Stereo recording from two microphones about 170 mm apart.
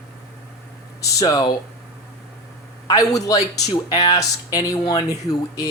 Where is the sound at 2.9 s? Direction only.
20° left (ahead or behind).